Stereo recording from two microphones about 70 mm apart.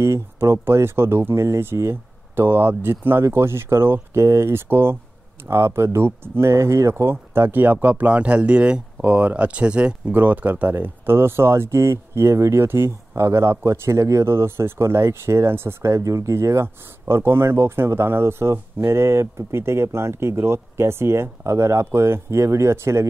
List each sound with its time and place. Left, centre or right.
0.0 s speech: right